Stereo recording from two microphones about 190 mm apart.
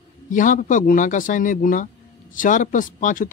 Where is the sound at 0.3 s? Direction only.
45° left (ahead or behind).